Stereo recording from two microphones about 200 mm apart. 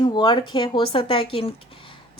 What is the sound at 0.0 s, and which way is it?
A woman's voice, 20° left (ahead or behind).